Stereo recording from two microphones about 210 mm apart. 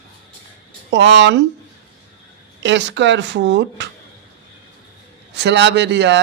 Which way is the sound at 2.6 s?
60° right (ahead or behind).